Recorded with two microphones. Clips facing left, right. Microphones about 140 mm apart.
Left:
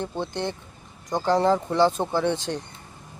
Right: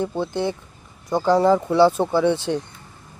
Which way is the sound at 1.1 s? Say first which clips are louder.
Right 4 dB; 10° right (ahead or behind).